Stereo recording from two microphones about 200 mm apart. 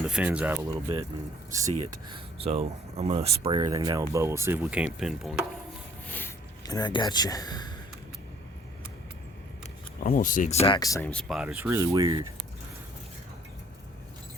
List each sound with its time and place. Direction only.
0.1 s speech: 5° right (ahead or behind)
0.7 s speech: 20° right (ahead or behind)
2.0 s speech: 25° right (ahead or behind); by 4.9 s 10° right (ahead or behind)
4.9 s a sound: centre (ahead or behind)
6.1 s speech: 10° left (ahead or behind)
10.0 s speech: 45° left (ahead or behind)
10.8 s speech: 15° left (ahead or behind)
11.1 s speech: centre (ahead or behind); by 12.3 s 20° right (ahead or behind)